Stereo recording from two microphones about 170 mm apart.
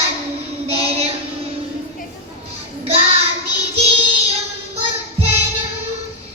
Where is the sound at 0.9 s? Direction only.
35° right (ahead or behind).